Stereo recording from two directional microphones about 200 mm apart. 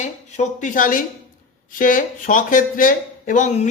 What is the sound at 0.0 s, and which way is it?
Speech, 40° left (ahead or behind).